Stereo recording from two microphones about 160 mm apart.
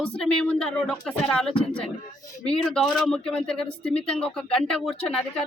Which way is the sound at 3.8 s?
40° left (ahead or behind).